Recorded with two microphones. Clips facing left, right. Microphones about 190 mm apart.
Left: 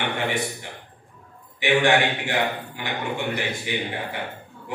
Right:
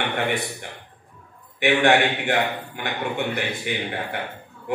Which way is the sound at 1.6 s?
60° right (ahead or behind).